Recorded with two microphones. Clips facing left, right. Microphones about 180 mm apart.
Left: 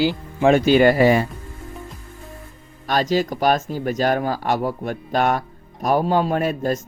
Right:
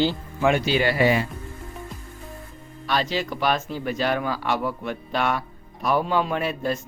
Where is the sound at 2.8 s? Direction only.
45° left (ahead or behind).